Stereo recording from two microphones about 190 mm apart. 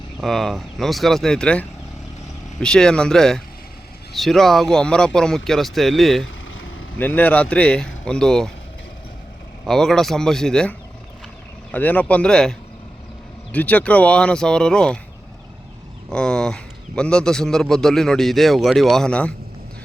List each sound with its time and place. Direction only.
0.2 s a man's voice: centre (ahead or behind)
6.2 s vehicle: 90° left
7.0 s a man's voice: 10° left (ahead or behind)
9.6 s a man's voice: centre (ahead or behind)
16.0 s a man's voice: 5° left (ahead or behind)